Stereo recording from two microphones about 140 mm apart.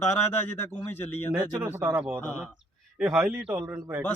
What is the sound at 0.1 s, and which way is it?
Speech, 15° left (ahead or behind).